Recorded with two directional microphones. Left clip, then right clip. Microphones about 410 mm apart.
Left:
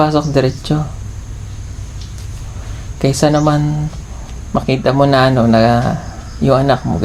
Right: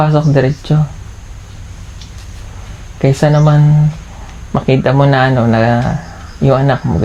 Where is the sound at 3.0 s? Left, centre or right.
Right.